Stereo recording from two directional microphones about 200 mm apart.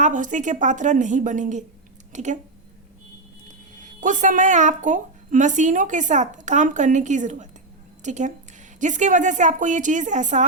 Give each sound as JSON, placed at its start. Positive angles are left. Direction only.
{"t": 0.0, "sound": "a woman's voice", "side_deg": -40}
{"t": 3.8, "sound": "a woman's voice", "side_deg": -40}